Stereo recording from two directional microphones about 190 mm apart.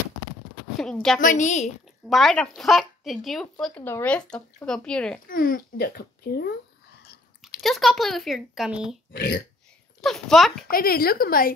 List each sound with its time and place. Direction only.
0.9 s speech: centre (ahead or behind)
1.2 s a woman's voice: 40° left (ahead or behind)
2.0 s speech: centre (ahead or behind)
5.3 s a child's voice: 50° left (ahead or behind)
7.6 s speech: centre (ahead or behind)
9.1 s speech: 55° left (ahead or behind)
10.0 s speech: centre (ahead or behind)
10.7 s a child's voice: 50° left (ahead or behind)